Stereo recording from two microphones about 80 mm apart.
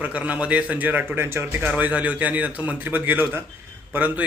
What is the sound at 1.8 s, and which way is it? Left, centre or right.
A man's voice, centre.